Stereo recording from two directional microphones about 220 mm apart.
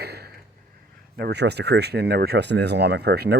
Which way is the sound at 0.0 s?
45° right (ahead or behind).